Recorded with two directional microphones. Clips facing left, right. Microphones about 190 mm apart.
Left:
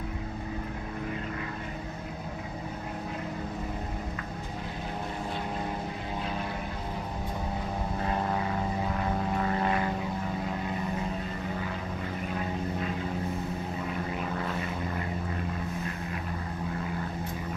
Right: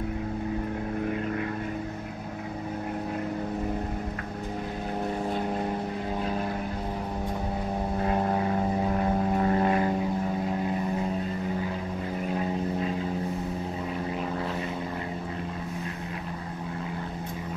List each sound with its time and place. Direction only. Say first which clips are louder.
8.9 s vehicle: right 4 dB; 35° right (ahead or behind)